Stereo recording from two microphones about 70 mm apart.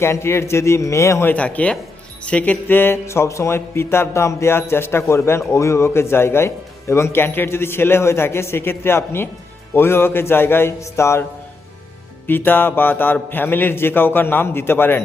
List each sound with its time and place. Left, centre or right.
0.0 s speech: left
1.3 s music: centre
2.2 s speech: centre; by 11.3 s left
12.3 s music: left
13.3 s speech: left